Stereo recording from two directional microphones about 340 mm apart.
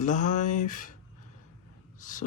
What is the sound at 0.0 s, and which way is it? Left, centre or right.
Speech, left.